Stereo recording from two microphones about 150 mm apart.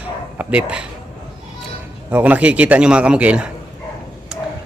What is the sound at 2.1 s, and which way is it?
Speech, 10° right (ahead or behind).